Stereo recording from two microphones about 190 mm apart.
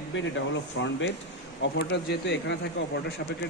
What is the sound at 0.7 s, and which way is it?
Speech, 70° left (ahead or behind).